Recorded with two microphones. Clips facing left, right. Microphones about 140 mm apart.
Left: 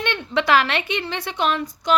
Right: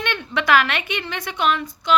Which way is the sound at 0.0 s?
30° left (ahead or behind).